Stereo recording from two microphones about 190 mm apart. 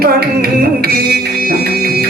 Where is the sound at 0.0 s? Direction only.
50° right (ahead or behind).